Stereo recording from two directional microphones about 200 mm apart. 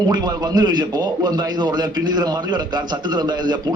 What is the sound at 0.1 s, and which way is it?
A man's voice, 20° right (ahead or behind).